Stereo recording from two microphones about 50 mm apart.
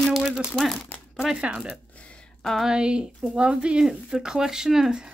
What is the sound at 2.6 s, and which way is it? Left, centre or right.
Speech, centre.